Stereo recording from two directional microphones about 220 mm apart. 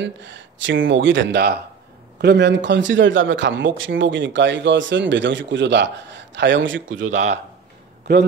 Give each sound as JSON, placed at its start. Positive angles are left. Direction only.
{"t": 0.0, "sound": "a man's voice", "side_deg": -55}